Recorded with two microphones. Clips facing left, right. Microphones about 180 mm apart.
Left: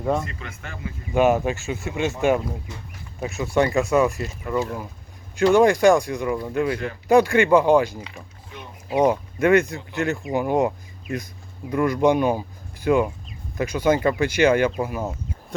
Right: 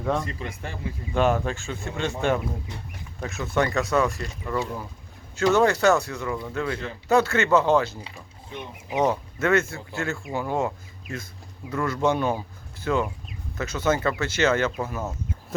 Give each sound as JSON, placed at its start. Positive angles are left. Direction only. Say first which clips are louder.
{"t": 0.3, "sound": "speech", "louder": "right 3 dB", "side_deg": -30}
{"t": 1.1, "sound": "speech", "louder": "left 4 dB", "side_deg": 15}
{"t": 3.2, "sound": "speech", "louder": "left 4 dB", "side_deg": 15}
{"t": 9.0, "sound": "speech", "louder": "left 4 dB", "side_deg": 15}
{"t": 11.7, "sound": "speech", "louder": "left 5 dB", "side_deg": 15}